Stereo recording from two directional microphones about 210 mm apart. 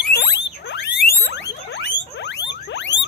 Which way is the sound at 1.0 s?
50° left (ahead or behind).